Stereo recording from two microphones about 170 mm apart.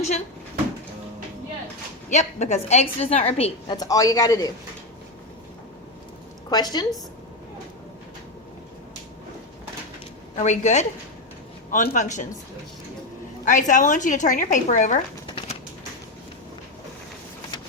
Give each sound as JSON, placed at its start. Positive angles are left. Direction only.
{"t": 2.0, "sound": "a woman's voice", "side_deg": 45}
{"t": 3.8, "sound": "a man's voice", "side_deg": 20}
{"t": 6.5, "sound": "a man's voice", "side_deg": 25}
{"t": 10.3, "sound": "speech", "side_deg": 45}
{"t": 13.4, "sound": "speech", "side_deg": 50}